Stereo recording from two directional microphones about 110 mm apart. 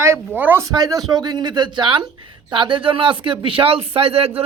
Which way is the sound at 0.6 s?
35° right (ahead or behind).